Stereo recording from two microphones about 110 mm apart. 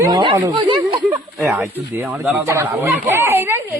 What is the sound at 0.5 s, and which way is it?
Speech, 45° right (ahead or behind).